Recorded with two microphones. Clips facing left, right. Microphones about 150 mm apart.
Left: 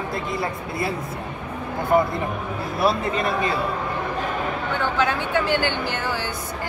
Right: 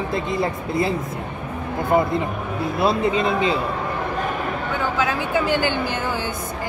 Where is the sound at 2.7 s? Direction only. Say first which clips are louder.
Right 2 dB; 20° right (ahead or behind).